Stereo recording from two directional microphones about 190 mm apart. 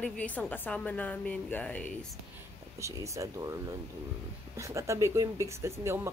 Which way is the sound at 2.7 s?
15° right (ahead or behind).